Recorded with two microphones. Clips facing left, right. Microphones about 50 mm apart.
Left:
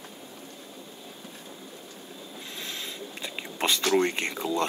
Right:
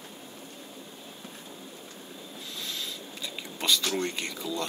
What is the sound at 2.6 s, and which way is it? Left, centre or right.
Whispering, left.